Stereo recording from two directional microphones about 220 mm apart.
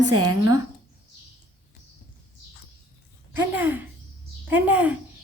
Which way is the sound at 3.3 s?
10° right (ahead or behind).